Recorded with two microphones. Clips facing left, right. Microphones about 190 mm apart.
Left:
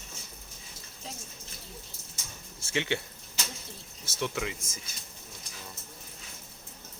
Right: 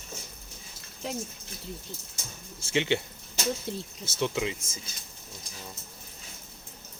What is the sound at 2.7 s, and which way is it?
Speech, 25° right (ahead or behind).